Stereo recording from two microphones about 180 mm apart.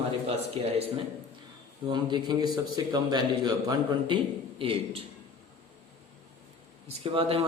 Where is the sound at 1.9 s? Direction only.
25° right (ahead or behind).